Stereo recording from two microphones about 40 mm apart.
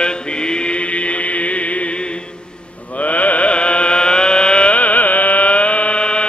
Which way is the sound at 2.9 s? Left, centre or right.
Left.